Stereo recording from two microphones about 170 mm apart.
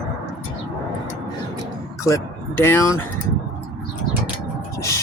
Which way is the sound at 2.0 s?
15° left (ahead or behind).